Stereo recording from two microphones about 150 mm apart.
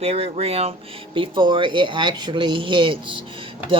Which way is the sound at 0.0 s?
45° right (ahead or behind).